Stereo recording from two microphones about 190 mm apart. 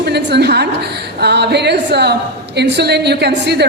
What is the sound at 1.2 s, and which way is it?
A woman's voice, 60° right (ahead or behind).